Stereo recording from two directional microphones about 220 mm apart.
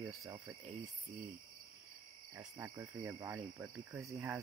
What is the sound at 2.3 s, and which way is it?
Speech, 15° right (ahead or behind).